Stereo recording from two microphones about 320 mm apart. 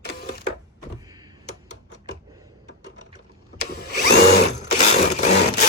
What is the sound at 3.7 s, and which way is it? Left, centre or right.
Drill, left.